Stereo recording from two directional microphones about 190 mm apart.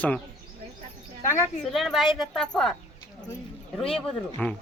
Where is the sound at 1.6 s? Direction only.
Centre (ahead or behind).